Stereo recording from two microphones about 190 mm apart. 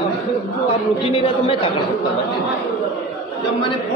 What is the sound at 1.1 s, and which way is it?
Speech, 30° left (ahead or behind).